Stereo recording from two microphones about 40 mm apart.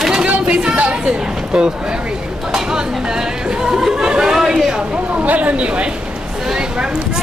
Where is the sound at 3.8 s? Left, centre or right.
Right.